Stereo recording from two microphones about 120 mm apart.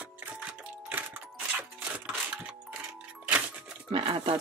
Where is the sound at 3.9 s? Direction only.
50° right (ahead or behind).